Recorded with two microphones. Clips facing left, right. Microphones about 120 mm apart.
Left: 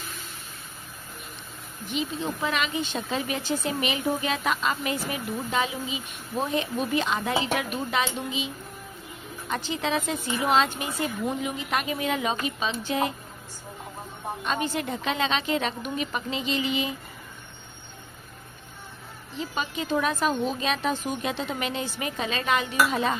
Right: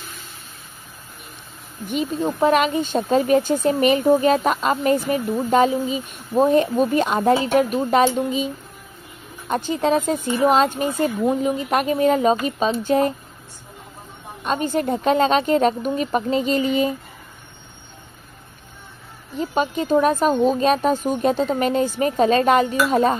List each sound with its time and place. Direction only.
1.9 s speech: 50° right (ahead or behind)
9.5 s speech: 45° right (ahead or behind)
14.4 s speech: 45° right (ahead or behind)
19.3 s speech: 45° right (ahead or behind)